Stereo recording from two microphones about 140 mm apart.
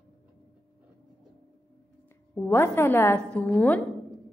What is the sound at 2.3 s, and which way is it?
A woman's voice, 15° left (ahead or behind).